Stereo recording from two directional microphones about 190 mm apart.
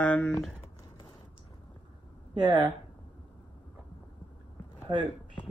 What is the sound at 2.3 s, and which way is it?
Speech, 20° right (ahead or behind).